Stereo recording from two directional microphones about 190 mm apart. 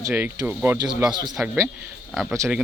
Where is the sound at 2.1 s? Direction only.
5° left (ahead or behind).